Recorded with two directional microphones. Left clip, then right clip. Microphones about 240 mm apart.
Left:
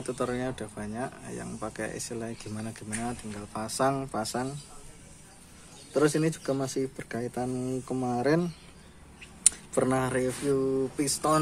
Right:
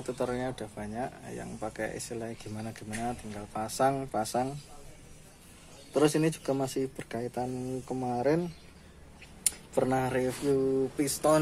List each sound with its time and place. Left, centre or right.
0.0 s speech: centre
5.9 s speech: centre
9.8 s speech: centre